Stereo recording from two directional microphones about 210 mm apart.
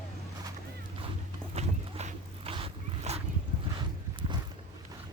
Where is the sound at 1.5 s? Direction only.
30° right (ahead or behind).